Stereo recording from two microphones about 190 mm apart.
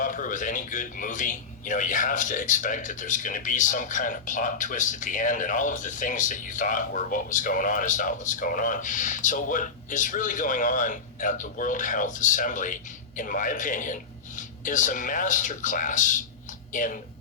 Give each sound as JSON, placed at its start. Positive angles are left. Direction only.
{"t": 0.0, "sound": "a man's voice", "side_deg": 45}